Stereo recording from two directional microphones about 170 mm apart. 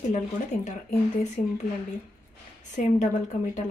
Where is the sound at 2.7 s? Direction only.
45° left (ahead or behind).